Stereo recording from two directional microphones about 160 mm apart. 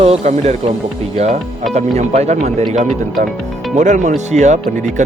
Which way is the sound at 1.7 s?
45° right (ahead or behind).